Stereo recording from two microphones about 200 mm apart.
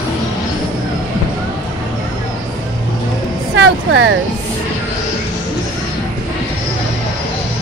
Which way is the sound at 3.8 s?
70° right (ahead or behind).